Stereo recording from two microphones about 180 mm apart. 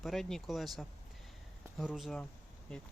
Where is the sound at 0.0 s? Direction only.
Centre (ahead or behind).